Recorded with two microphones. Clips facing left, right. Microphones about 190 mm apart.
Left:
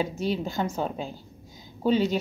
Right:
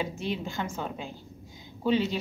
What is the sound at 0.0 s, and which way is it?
A woman's voice, 40° left (ahead or behind).